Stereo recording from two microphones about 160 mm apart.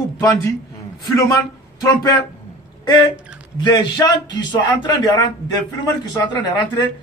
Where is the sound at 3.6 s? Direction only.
25° left (ahead or behind).